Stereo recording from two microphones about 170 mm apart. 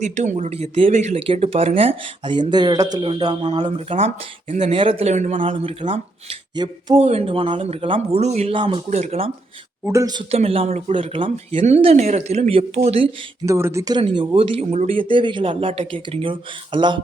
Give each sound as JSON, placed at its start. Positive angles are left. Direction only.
{"t": 0.0, "sound": "speech", "side_deg": -45}
{"t": 1.3, "sound": "speech", "side_deg": -35}
{"t": 4.8, "sound": "speech", "side_deg": -35}
{"t": 8.9, "sound": "speech", "side_deg": -40}
{"t": 9.8, "sound": "speech", "side_deg": -20}
{"t": 13.4, "sound": "speech", "side_deg": -15}